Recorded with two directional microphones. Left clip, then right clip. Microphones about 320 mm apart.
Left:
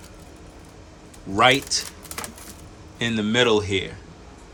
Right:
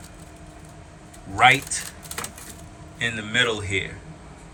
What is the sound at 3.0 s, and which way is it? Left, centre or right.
Speech, centre.